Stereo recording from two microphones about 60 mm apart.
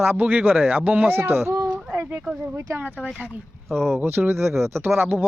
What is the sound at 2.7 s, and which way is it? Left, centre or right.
Speech, right.